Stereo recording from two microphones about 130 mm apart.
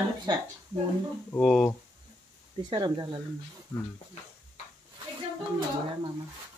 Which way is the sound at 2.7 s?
30° right (ahead or behind).